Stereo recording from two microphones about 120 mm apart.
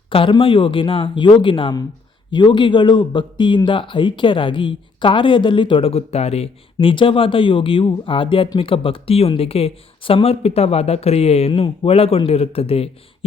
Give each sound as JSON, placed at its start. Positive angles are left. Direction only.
{"t": 0.1, "sound": "speech", "side_deg": 45}